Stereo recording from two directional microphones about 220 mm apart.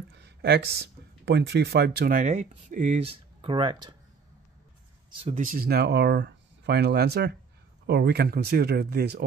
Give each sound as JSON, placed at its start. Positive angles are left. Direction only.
{"t": 0.2, "sound": "speech", "side_deg": -50}
{"t": 5.1, "sound": "speech", "side_deg": -25}
{"t": 5.4, "sound": "speech", "side_deg": -40}